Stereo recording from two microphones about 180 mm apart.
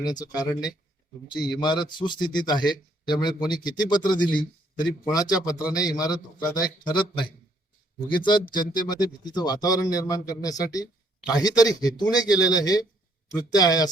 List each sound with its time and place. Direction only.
0.0 s speech: 20° left (ahead or behind)
8.5 s speech: 25° left (ahead or behind)